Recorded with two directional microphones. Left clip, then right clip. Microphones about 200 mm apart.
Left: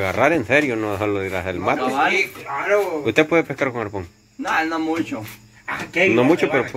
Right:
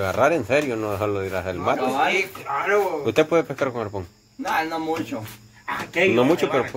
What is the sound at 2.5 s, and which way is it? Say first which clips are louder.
Speech: even; 30° left (ahead or behind).